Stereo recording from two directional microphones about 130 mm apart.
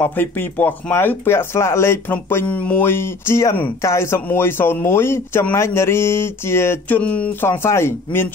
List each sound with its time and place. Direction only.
0.0 s speech: 15° left (ahead or behind)